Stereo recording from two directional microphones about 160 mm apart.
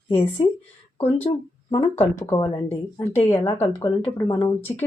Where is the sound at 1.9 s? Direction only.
20° left (ahead or behind).